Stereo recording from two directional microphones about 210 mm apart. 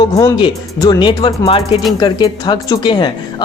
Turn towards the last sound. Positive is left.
turn(degrees=20)  # may be behind; listen again after turning